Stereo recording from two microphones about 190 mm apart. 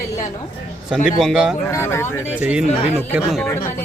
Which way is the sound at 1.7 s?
15° left (ahead or behind).